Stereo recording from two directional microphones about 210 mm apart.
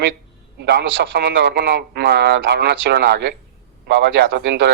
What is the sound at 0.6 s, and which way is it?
Speech, 55° right (ahead or behind).